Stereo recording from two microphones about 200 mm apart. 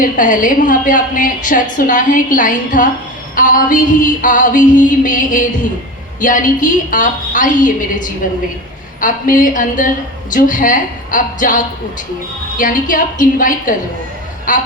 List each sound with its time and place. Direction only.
0.0 s a woman's voice: 40° left (ahead or behind)